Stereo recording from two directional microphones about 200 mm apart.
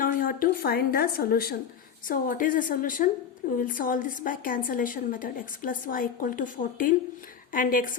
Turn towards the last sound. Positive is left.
turn(degrees=45)  # may be behind; listen again after turning